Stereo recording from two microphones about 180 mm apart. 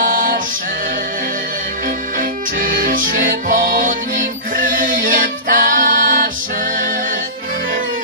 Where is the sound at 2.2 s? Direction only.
50° right (ahead or behind).